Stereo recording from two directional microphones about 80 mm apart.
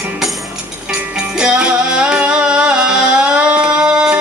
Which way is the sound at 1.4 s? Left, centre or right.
Centre.